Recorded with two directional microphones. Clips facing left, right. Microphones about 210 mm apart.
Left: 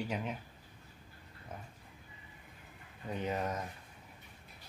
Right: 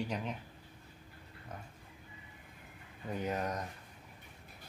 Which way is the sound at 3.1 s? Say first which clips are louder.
Even; centre (ahead or behind).